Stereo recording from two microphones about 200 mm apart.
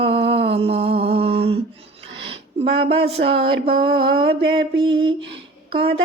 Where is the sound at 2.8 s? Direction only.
30° right (ahead or behind).